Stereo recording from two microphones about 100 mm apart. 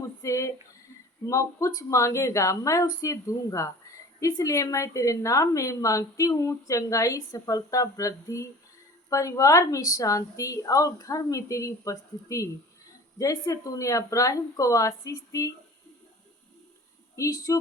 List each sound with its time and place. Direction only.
0.2 s a sound: 30° left (ahead or behind)
1.3 s a woman's voice: 30° left (ahead or behind)
17.2 s a woman's voice: 30° left (ahead or behind)